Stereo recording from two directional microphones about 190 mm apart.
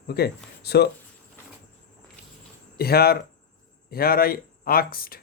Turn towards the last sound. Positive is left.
turn(degrees=50)  # may be behind; listen again after turning